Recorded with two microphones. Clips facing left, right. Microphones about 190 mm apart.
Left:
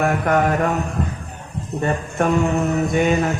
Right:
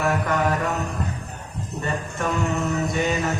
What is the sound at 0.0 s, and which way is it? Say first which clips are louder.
Music: left 4 dB; 50° left (ahead or behind).